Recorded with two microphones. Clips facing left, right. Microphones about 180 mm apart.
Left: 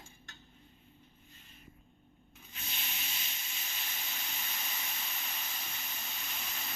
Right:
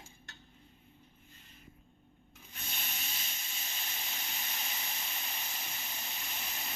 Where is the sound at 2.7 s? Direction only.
45° right (ahead or behind).